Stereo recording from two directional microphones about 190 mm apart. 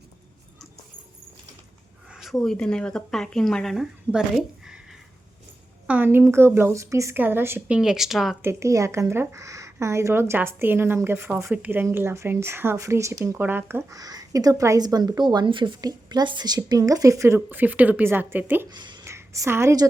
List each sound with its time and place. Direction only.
2.0 s speech: centre (ahead or behind)
8.4 s speech: 15° right (ahead or behind)
18.7 s speech: 25° right (ahead or behind)